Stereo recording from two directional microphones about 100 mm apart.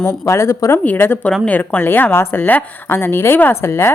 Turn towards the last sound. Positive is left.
turn(degrees=25)  # may be behind; listen again after turning